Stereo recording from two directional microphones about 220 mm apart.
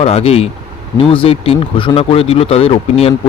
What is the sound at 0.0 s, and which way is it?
Speech, 25° left (ahead or behind).